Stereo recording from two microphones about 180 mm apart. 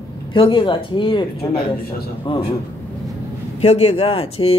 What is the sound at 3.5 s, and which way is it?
Speech, 35° left (ahead or behind).